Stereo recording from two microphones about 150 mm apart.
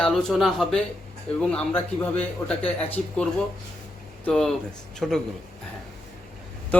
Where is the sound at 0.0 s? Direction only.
5° left (ahead or behind).